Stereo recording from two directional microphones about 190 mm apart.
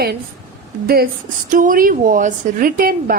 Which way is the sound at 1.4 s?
45° right (ahead or behind).